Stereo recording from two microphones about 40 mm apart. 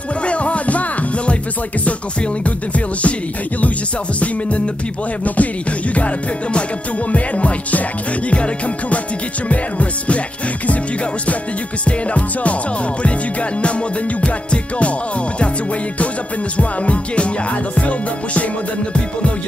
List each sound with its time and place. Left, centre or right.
0.2 s music: left
2.4 s music: left
4.2 s music: left
9.5 s music: left
11.8 s music: left
16.5 s music: left